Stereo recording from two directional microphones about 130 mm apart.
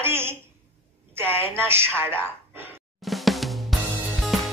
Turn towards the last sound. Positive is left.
turn(degrees=0)  # may be behind; listen again after turning